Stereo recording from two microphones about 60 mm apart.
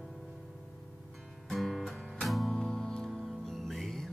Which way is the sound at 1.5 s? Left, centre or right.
Centre.